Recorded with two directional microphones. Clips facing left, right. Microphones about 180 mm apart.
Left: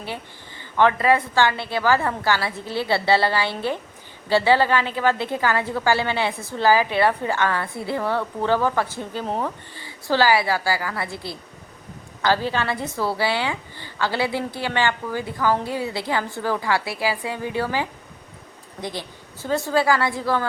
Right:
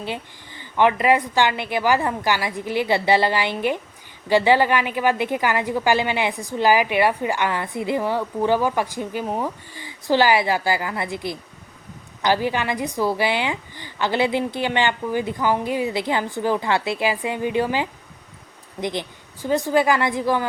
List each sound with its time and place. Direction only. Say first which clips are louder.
0.0 s a woman's voice: right 3 dB; 15° right (ahead or behind)